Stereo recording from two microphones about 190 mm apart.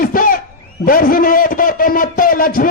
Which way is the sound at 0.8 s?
50° left (ahead or behind).